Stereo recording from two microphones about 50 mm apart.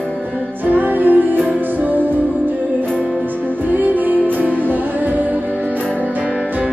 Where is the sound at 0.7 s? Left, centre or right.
Right.